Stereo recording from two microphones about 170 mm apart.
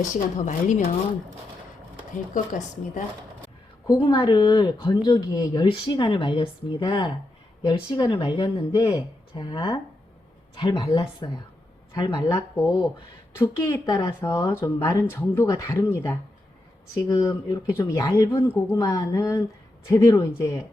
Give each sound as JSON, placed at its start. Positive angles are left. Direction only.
{"t": 0.1, "sound": "a woman's voice", "side_deg": 50}
{"t": 2.3, "sound": "a woman's voice", "side_deg": 50}
{"t": 3.8, "sound": "speech", "side_deg": 30}
{"t": 13.4, "sound": "speech", "side_deg": 20}